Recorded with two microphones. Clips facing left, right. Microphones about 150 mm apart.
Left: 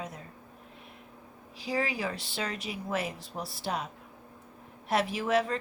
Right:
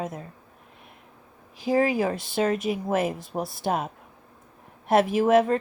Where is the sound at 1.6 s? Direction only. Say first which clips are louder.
Right 9 dB; 50° right (ahead or behind).